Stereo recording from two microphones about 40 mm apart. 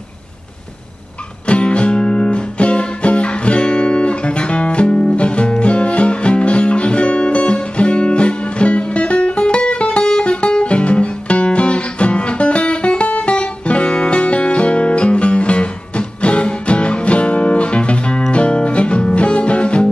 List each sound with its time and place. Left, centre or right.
1.5 s music: left